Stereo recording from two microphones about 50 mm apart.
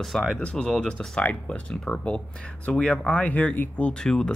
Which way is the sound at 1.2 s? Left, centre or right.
Left.